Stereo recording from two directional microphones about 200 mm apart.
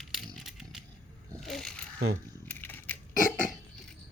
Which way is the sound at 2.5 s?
10° left (ahead or behind).